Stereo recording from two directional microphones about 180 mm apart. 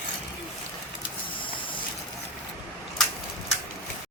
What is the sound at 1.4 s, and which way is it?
Vehicle, 25° left (ahead or behind).